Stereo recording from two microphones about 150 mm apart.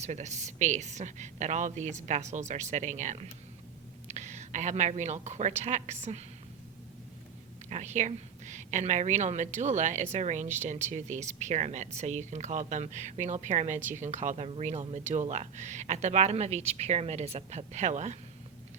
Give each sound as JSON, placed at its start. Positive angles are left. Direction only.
{"t": 0.0, "sound": "a woman's voice", "side_deg": -50}
{"t": 7.7, "sound": "a woman's voice", "side_deg": -50}